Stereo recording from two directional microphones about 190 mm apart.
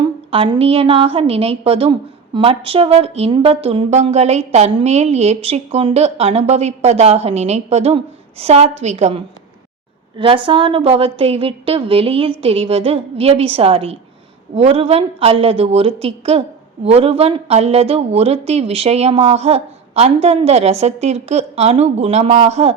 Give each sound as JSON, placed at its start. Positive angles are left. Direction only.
{"t": 0.0, "sound": "a woman's voice", "side_deg": -25}